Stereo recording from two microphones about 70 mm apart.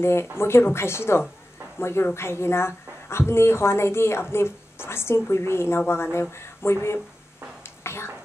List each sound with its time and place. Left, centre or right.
0.0 s speech: left
7.6 s whispering: left